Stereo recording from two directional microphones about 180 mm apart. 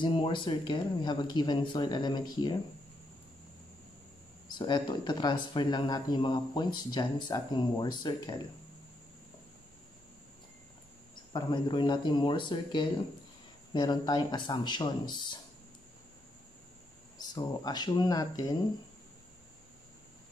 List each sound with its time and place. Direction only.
0.0 s speech: 25° left (ahead or behind)
4.5 s speech: 25° left (ahead or behind)
11.3 s speech: 25° left (ahead or behind)
17.2 s speech: 20° left (ahead or behind)